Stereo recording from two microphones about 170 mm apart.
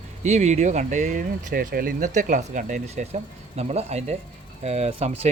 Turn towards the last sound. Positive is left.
turn(degrees=-40)  # may be behind; listen again after turning